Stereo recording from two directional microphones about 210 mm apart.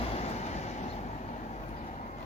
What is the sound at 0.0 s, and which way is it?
Vehicle, 30° left (ahead or behind).